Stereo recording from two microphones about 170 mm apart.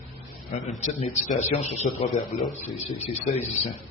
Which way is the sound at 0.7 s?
45° left (ahead or behind).